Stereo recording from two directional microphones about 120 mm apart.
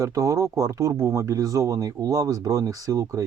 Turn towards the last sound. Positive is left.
turn(degrees=-25)  # may be behind; listen again after turning